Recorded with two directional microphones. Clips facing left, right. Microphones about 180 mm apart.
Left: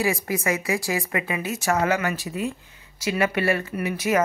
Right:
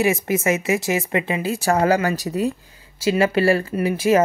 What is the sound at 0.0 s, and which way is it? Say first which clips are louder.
Speech: right 5 dB; 20° right (ahead or behind).